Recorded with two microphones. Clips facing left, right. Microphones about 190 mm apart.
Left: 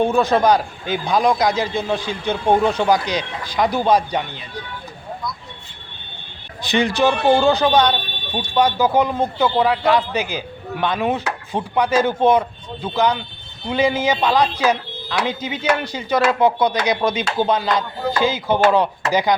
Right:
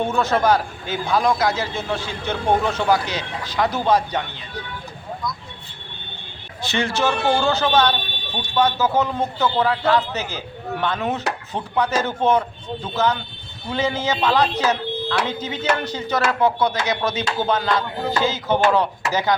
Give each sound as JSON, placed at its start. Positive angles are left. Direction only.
{"t": 0.0, "sound": "a man's voice", "side_deg": 15}
{"t": 6.6, "sound": "a man's voice", "side_deg": 15}